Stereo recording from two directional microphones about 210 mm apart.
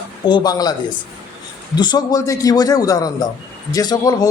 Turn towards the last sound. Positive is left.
turn(degrees=15)  # may be behind; listen again after turning